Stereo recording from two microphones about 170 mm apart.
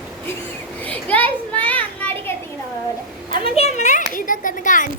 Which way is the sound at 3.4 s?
35° left (ahead or behind).